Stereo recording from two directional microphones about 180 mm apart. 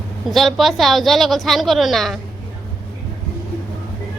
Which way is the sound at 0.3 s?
Centre (ahead or behind).